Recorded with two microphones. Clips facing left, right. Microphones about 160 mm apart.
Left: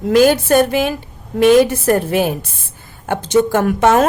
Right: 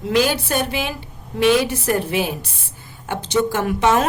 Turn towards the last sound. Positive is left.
turn(degrees=50)  # may be behind; listen again after turning